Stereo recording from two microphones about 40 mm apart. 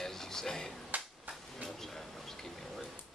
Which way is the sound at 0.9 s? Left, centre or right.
Right.